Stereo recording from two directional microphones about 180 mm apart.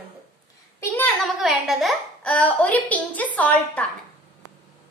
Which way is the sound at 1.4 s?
Centre (ahead or behind).